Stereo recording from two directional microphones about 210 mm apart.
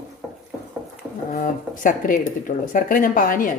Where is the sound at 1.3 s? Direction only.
40° left (ahead or behind).